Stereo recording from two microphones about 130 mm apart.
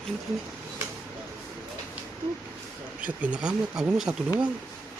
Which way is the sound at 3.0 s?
10° right (ahead or behind).